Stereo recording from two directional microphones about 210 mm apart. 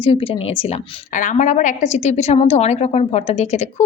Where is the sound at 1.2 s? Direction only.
35° left (ahead or behind).